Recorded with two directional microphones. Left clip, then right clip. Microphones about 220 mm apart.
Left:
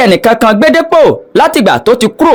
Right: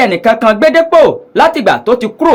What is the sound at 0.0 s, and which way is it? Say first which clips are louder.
A man's voice: left 2 dB; 50° left (ahead or behind).